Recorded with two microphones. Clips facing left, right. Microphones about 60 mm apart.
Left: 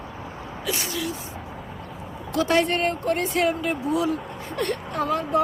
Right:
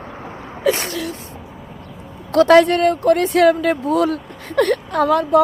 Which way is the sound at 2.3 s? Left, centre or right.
Right.